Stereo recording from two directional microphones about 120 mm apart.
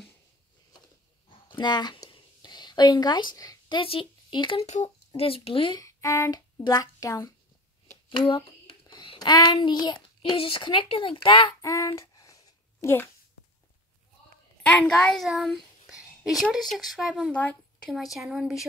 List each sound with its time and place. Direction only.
1.5 s speech: 35° left (ahead or behind)
4.6 s speech: 70° left (ahead or behind); by 5.8 s 50° left (ahead or behind)
5.8 s a child's voice: 30° left (ahead or behind); by 11.5 s 45° left (ahead or behind)
11.6 s a sound: 25° left (ahead or behind)
14.8 s a child's voice: 5° left (ahead or behind)
17.3 s a woman's voice: 10° left (ahead or behind)